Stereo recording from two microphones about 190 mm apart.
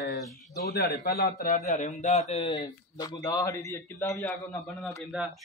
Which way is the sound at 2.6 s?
20° left (ahead or behind).